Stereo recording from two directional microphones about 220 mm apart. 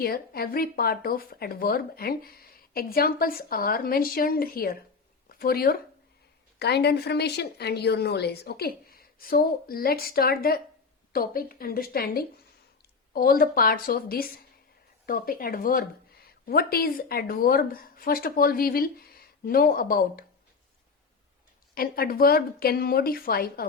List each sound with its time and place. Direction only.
0.0 s a woman's voice: 45° left (ahead or behind)
21.8 s a woman's voice: 40° left (ahead or behind)